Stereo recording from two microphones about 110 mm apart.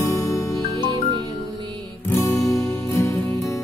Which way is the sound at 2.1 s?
25° left (ahead or behind).